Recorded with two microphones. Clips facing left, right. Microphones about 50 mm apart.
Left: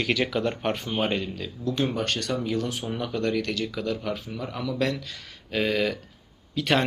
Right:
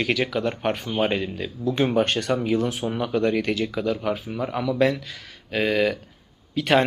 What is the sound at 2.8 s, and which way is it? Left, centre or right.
Speech, centre.